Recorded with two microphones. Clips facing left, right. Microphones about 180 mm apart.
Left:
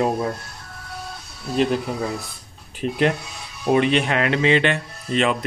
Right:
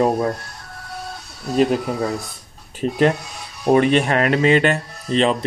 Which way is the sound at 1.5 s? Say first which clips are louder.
Right 3 dB; 40° right (ahead or behind).